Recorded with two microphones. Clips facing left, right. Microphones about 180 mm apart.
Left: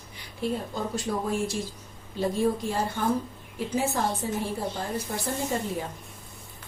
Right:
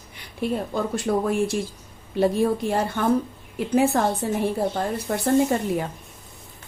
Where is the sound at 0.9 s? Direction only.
60° right (ahead or behind).